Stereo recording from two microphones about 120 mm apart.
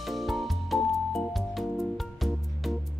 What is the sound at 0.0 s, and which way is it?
Music, centre (ahead or behind).